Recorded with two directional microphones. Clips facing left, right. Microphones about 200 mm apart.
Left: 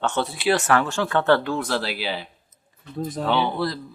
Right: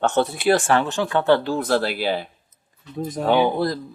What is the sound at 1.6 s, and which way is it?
Speech, 50° right (ahead or behind).